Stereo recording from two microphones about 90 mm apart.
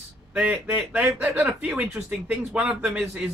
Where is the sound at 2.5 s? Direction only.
5° right (ahead or behind).